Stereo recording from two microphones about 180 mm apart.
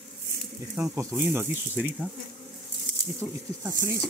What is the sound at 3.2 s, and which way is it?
Speech, 5° right (ahead or behind).